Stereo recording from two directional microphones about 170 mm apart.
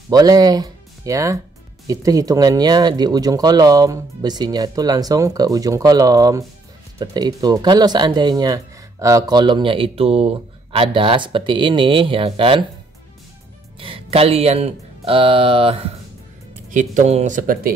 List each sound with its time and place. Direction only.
0.1 s speech: 25° right (ahead or behind)
13.7 s speech: 30° right (ahead or behind)
16.7 s speech: 45° right (ahead or behind)